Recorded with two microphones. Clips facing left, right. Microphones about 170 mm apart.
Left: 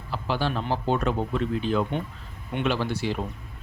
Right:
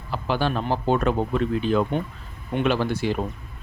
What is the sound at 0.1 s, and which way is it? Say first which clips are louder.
A man's voice: right 3 dB; 55° right (ahead or behind).